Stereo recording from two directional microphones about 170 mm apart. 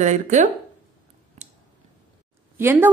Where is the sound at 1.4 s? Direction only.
40° right (ahead or behind).